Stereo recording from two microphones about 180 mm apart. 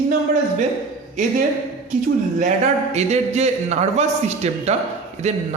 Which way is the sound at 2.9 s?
40° right (ahead or behind).